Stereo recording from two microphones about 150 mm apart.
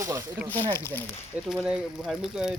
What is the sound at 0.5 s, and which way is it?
Speech, 15° left (ahead or behind).